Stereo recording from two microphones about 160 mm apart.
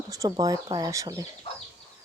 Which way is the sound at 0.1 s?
20° right (ahead or behind).